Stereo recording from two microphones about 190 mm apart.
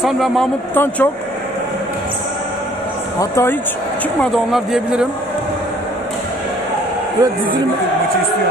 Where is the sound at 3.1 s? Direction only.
15° left (ahead or behind).